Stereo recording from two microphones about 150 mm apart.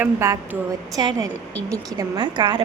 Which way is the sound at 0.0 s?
20° right (ahead or behind).